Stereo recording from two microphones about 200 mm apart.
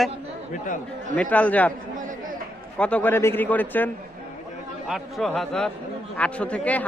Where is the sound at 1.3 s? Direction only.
5° left (ahead or behind).